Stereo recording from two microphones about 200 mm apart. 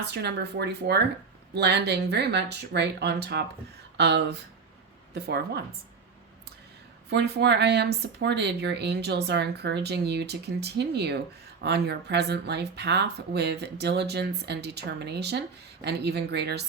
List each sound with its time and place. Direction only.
0.0 s a woman's voice: 55° right (ahead or behind)
7.1 s speech: 55° right (ahead or behind)